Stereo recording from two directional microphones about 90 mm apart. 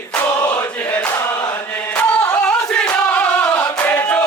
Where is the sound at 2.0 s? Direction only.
15° left (ahead or behind).